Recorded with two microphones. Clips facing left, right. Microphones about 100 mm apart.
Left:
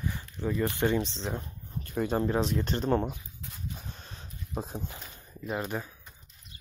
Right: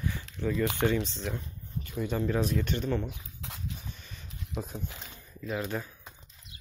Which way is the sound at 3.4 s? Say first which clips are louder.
Right 3 dB; 90° right.